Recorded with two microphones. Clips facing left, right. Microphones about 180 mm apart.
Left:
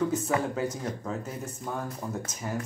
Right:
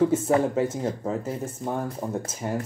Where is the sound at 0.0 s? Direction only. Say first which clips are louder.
Right 6 dB; 30° right (ahead or behind).